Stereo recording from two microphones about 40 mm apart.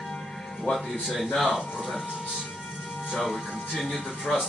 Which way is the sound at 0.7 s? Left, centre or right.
Centre.